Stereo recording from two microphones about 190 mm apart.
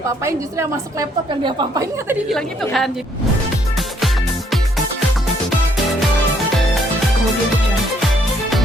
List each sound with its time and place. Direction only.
0.3 s a woman's voice: 15° right (ahead or behind)
2.3 s a woman's voice: centre (ahead or behind)
8.0 s music: centre (ahead or behind)